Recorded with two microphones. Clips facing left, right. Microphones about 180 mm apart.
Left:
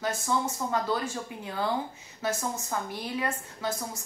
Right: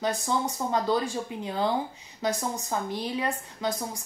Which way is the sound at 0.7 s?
25° right (ahead or behind).